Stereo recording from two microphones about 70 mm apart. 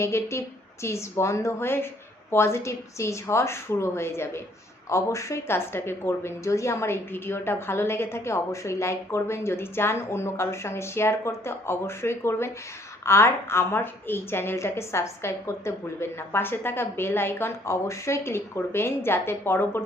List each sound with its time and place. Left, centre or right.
0.0 s a woman's voice: left